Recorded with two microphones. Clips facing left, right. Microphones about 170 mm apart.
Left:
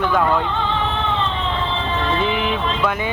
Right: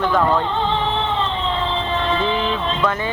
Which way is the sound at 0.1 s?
10° left (ahead or behind).